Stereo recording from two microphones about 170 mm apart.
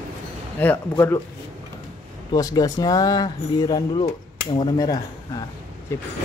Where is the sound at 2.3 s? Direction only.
20° left (ahead or behind).